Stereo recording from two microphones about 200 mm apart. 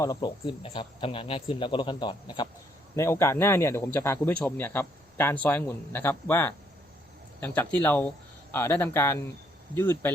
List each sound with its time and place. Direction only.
0.0 s a man's voice: 20° left (ahead or behind)